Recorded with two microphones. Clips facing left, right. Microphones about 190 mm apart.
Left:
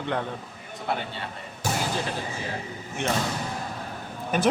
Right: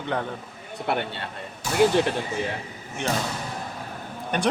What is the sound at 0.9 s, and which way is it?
Speech, 65° right (ahead or behind).